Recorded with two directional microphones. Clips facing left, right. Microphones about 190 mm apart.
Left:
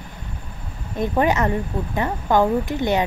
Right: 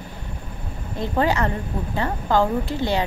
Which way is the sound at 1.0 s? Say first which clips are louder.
Left 2 dB; 20° left (ahead or behind).